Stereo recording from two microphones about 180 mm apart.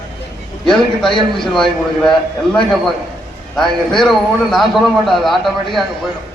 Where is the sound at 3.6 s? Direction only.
Centre (ahead or behind).